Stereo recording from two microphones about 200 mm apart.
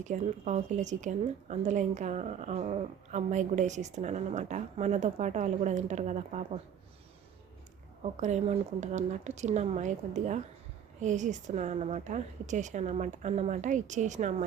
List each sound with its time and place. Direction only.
0.0 s a woman's voice: 35° right (ahead or behind)
8.0 s a woman's voice: 35° right (ahead or behind)